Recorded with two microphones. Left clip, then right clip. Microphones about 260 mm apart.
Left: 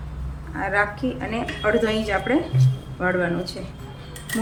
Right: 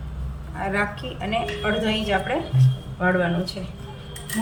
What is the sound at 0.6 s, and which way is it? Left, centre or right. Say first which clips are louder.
A woman's voice: left 3 dB; centre.